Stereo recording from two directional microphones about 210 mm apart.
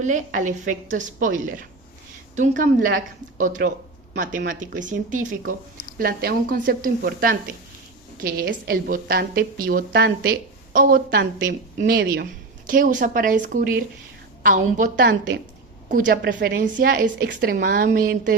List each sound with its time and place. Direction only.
0.0 s a woman's voice: 35° right (ahead or behind)
2.6 s a woman's voice: 40° right (ahead or behind)
16.0 s a woman's voice: 50° right (ahead or behind)